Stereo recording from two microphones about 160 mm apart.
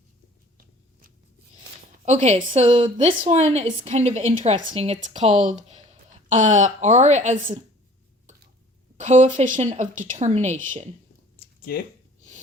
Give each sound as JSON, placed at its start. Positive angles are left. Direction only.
{"t": 2.0, "sound": "a woman's voice", "side_deg": -45}
{"t": 9.0, "sound": "a woman's voice", "side_deg": -50}
{"t": 11.3, "sound": "a sound", "side_deg": 65}